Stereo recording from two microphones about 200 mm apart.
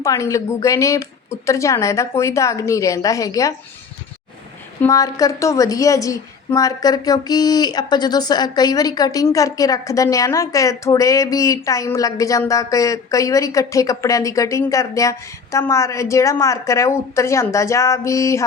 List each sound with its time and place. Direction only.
0.0 s a woman's voice: 15° left (ahead or behind)
4.8 s a woman's voice: 15° left (ahead or behind)